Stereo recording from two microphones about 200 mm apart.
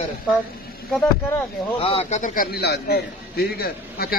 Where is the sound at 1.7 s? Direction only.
30° left (ahead or behind).